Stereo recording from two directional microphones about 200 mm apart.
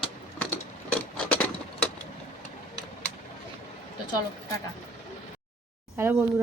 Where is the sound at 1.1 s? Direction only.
5° left (ahead or behind).